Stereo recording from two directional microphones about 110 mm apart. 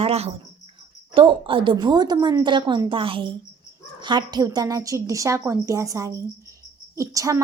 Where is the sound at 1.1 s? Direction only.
50° right (ahead or behind).